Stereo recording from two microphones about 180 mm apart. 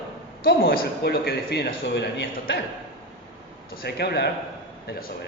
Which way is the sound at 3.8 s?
65° left (ahead or behind).